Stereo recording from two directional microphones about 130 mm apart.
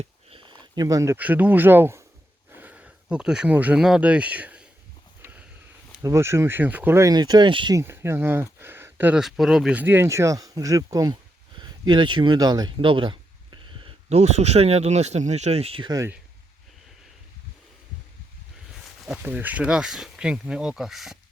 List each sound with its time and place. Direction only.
0.0 s a sound: 45° right (ahead or behind)
0.9 s speech: 25° right (ahead or behind)
1.2 s speech: 15° right (ahead or behind)
5.2 s a sound: 10° right (ahead or behind)
6.0 s speech: 20° right (ahead or behind)
7.1 s speech: 30° right (ahead or behind)
7.8 s speech: 20° right (ahead or behind)
9.2 s speech: centre (ahead or behind)
9.8 s speech: 15° right (ahead or behind); by 13.9 s 40° right (ahead or behind)
14.1 s speech: 55° right (ahead or behind)
18.7 s speech: 5° right (ahead or behind)